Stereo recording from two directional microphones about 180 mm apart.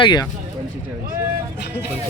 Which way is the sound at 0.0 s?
25° left (ahead or behind).